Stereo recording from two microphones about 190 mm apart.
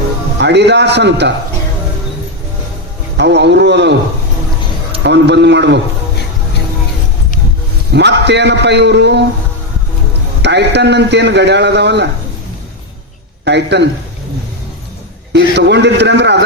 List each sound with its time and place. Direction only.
0.3 s a man's voice: 65° right (ahead or behind)
3.2 s a man's voice: 65° right (ahead or behind)
5.0 s a man's voice: 65° right (ahead or behind)
7.9 s a man's voice: 65° right (ahead or behind)
10.4 s a man's voice: 65° right (ahead or behind)
13.4 s speech: 65° right (ahead or behind)
15.5 s a man's voice: 65° right (ahead or behind)